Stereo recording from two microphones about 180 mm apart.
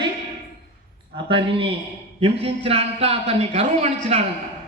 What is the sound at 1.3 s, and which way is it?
A man's voice, 30° right (ahead or behind).